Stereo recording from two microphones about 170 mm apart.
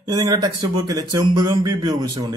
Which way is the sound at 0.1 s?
25° right (ahead or behind).